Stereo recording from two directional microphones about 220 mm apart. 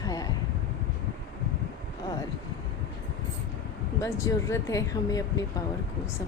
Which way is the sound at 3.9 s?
15° left (ahead or behind).